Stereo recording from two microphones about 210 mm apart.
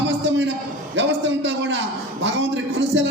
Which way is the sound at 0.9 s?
60° right (ahead or behind).